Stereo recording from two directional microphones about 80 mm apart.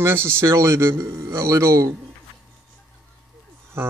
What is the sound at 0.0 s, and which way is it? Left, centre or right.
A man's voice, right.